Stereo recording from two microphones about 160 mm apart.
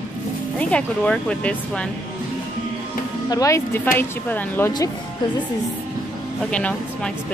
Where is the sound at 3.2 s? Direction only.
20° left (ahead or behind).